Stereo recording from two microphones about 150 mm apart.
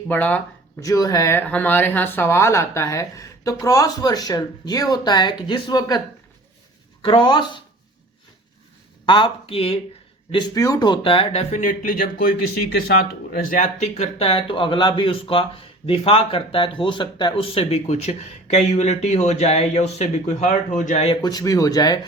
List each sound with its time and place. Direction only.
0.1 s speech: 10° left (ahead or behind)
0.8 s speech: 25° left (ahead or behind)
7.0 s speech: 35° left (ahead or behind)
9.0 s speech: 35° left (ahead or behind)
10.3 s speech: 25° left (ahead or behind); by 12.0 s 65° left (ahead or behind)
13.5 s speech: 55° left (ahead or behind)
21.2 s speech: 25° left (ahead or behind)